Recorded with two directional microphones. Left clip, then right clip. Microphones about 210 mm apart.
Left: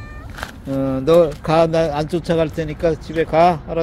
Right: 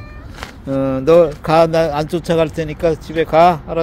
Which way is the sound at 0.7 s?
10° right (ahead or behind).